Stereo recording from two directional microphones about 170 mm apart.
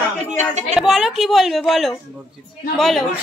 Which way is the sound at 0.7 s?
Centre (ahead or behind).